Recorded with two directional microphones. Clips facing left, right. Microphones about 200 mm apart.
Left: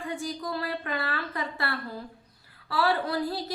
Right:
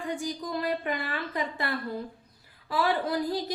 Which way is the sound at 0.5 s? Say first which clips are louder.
Right 5 dB; 15° right (ahead or behind).